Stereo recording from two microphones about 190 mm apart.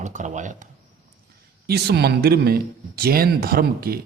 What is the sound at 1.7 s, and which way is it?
A man's voice, 60° right (ahead or behind).